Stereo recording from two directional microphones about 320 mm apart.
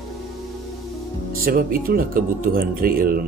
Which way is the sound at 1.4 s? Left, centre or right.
Right.